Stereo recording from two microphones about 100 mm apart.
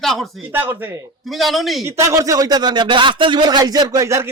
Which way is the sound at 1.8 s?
30° right (ahead or behind).